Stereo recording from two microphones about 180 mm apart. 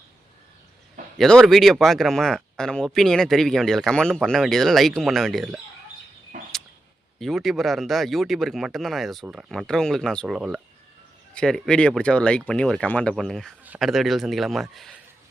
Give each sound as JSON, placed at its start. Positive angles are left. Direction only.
{"t": 1.2, "sound": "speech", "side_deg": 0}
{"t": 6.3, "sound": "a sound", "side_deg": -45}
{"t": 7.2, "sound": "speech", "side_deg": 0}